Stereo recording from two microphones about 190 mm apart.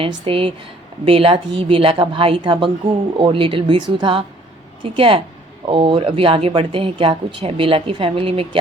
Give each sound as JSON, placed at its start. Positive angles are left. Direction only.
{"t": 0.3, "sound": "speech", "side_deg": -30}